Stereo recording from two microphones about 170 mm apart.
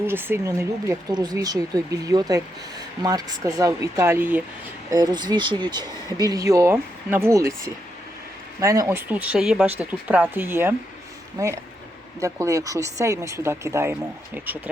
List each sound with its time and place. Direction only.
0.1 s speech: 15° right (ahead or behind)
4.9 s speech: 25° right (ahead or behind)